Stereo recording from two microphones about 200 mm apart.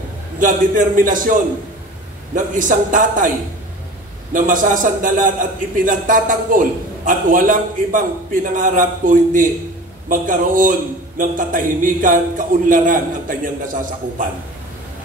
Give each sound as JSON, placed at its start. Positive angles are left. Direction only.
{"t": 0.4, "sound": "a man's voice", "side_deg": -40}
{"t": 4.3, "sound": "a man's voice", "side_deg": -40}